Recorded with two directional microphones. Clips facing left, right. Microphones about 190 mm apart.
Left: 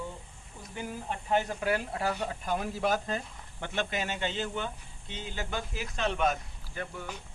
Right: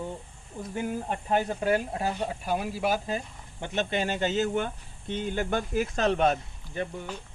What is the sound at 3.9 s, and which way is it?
Speech, 35° right (ahead or behind).